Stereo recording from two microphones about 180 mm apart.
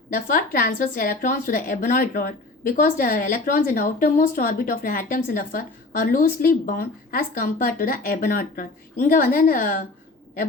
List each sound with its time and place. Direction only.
0.1 s a woman's voice: 55° left (ahead or behind)